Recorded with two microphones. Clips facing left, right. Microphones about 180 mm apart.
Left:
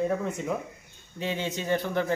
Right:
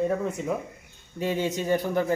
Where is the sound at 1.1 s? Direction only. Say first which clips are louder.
Right 4 dB; 45° right (ahead or behind).